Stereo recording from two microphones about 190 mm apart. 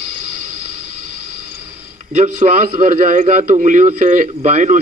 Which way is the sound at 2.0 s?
40° right (ahead or behind).